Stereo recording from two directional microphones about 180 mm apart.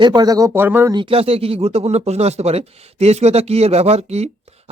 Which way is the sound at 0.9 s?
30° right (ahead or behind).